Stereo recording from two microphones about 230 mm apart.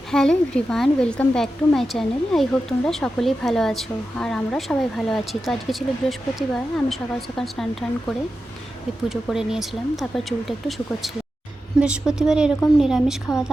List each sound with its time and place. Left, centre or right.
0.1 s speech: centre
9.0 s speech: centre